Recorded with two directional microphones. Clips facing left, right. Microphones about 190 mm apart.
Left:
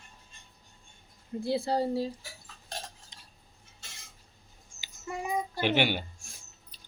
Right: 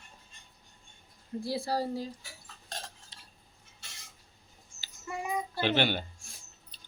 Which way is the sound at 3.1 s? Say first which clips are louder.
Even; 20° left (ahead or behind).